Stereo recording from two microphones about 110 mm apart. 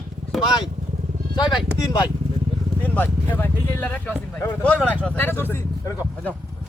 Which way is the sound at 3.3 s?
20° left (ahead or behind).